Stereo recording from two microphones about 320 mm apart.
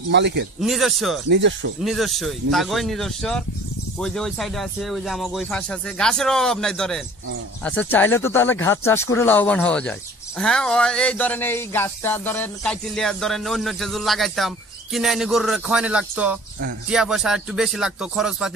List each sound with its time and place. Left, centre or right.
0.1 s speech: right
0.6 s speech: centre
1.3 s speech: right
1.8 s speech: centre